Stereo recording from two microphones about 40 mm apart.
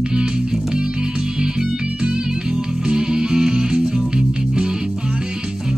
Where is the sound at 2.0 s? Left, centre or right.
Right.